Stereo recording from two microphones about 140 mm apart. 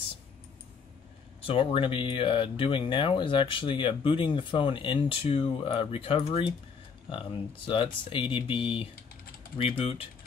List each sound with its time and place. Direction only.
1.4 s speech: 40° left (ahead or behind)